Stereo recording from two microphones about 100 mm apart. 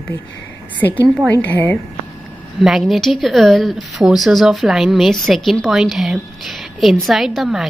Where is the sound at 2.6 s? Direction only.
5° right (ahead or behind).